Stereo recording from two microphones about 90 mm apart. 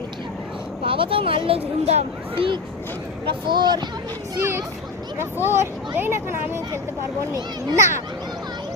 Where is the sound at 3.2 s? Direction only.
60° right (ahead or behind).